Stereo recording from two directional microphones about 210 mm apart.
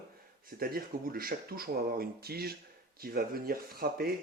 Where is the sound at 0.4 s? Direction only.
45° right (ahead or behind).